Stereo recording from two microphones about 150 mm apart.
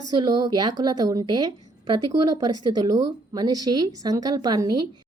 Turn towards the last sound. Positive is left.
turn(degrees=-30)  # may be behind; listen again after turning